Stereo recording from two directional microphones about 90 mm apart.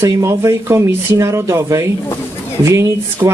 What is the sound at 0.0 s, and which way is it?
Speech, 35° right (ahead or behind).